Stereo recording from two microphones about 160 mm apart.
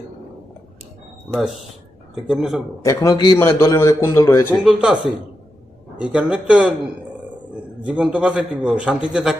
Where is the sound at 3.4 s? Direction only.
15° left (ahead or behind).